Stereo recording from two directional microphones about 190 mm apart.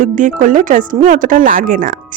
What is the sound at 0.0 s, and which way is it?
A woman's voice, 45° right (ahead or behind).